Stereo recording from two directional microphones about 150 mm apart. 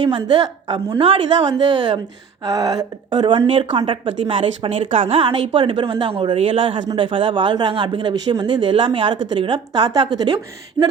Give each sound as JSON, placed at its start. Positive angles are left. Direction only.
{"t": 0.9, "sound": "a woman's voice", "side_deg": -40}